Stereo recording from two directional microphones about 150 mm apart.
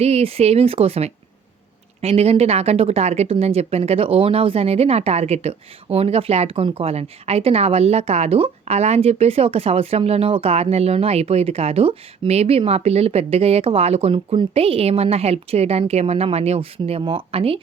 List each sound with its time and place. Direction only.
0.0 s speech: 40° right (ahead or behind)